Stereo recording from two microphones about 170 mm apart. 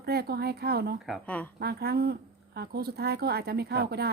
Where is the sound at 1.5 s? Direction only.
70° right (ahead or behind).